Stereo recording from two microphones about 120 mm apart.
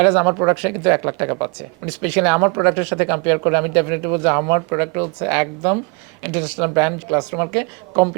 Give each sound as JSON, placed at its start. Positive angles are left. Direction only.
{"t": 0.0, "sound": "speech", "side_deg": -15}